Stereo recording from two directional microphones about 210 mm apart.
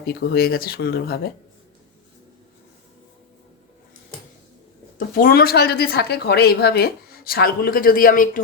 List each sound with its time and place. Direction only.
0.1 s speech: 45° left (ahead or behind)
4.9 s speech: 45° left (ahead or behind)